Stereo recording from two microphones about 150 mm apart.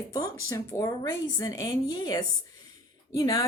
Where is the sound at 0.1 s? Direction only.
20° left (ahead or behind).